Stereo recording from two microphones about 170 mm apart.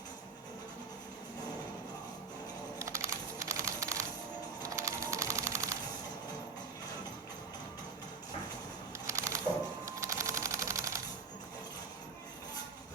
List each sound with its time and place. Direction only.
2.7 s music: 15° right (ahead or behind)
9.0 s music: 20° right (ahead or behind)
9.8 s typewriter: 15° right (ahead or behind)